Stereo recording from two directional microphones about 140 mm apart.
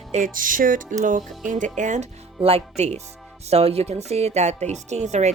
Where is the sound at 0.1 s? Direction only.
70° right (ahead or behind).